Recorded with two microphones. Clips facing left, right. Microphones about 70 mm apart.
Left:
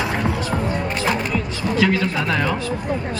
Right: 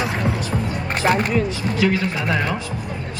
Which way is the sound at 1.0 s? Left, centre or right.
Right.